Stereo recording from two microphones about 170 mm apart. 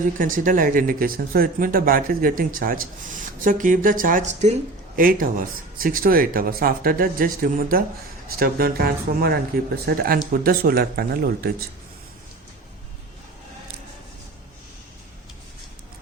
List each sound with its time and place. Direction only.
0.2 s speech: 50° right (ahead or behind)
4.9 s speech: 55° right (ahead or behind)